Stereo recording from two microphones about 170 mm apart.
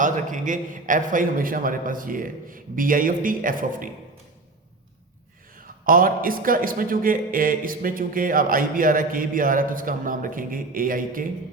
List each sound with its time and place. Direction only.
0.0 s a man's voice: 50° right (ahead or behind)
5.5 s a man's voice: 55° right (ahead or behind)